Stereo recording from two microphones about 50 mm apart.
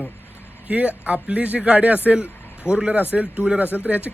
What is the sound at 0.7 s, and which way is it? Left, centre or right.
Speech, right.